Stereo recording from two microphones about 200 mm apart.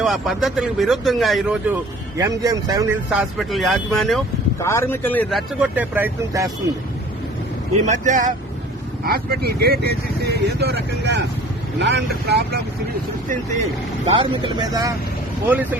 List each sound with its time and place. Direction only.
0.0 s speech: centre (ahead or behind)
3.1 s speech: centre (ahead or behind)
4.6 s speech: 15° left (ahead or behind); by 6.5 s 10° right (ahead or behind)
7.9 s speech: 40° right (ahead or behind)
9.0 s speech: 50° right (ahead or behind)
14.2 s speech: 20° right (ahead or behind)
15.4 s speech: 10° right (ahead or behind)